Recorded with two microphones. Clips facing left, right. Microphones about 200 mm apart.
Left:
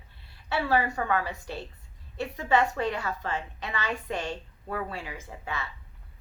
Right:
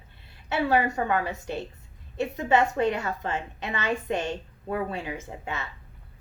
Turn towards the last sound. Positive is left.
turn(degrees=-25)  # may be behind; listen again after turning